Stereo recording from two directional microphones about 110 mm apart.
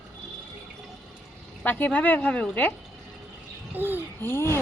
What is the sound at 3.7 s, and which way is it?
Speech, 15° right (ahead or behind).